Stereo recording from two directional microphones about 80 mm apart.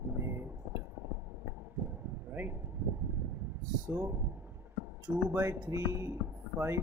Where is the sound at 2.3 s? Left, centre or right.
Right.